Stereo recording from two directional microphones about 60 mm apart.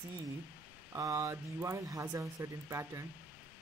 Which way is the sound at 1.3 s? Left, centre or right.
Right.